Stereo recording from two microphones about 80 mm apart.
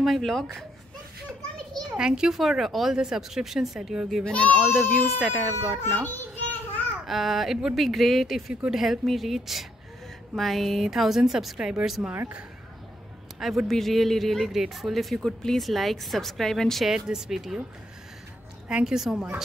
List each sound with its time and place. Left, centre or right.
0.0 s speech: centre
2.0 s speech: centre
4.2 s a child's voice: centre
4.7 s speech: centre
7.1 s speech: centre
12.1 s a woman's voice: centre
13.4 s speech: centre
16.9 s speech: centre
18.7 s a woman's voice: centre